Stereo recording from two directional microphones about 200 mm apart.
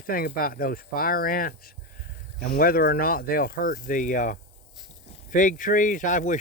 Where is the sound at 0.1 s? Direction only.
45° left (ahead or behind).